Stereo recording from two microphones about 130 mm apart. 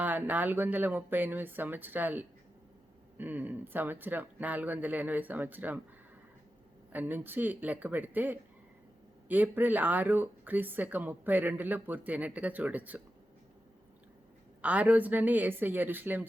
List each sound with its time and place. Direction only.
0.0 s speech: 15° right (ahead or behind)
6.9 s speech: 15° right (ahead or behind)
14.6 s speech: 10° right (ahead or behind)